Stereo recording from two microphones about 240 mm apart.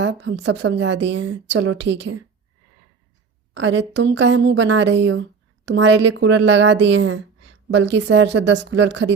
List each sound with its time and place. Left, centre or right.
0.2 s a woman's voice: right
3.5 s a woman's voice: right